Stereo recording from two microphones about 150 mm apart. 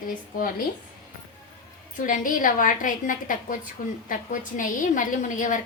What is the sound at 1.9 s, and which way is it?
A woman's voice, 60° left (ahead or behind).